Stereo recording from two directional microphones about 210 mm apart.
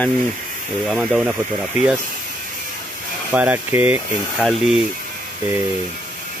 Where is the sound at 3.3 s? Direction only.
5° right (ahead or behind).